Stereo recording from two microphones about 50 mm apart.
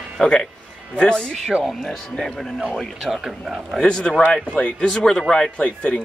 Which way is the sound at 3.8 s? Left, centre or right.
Centre.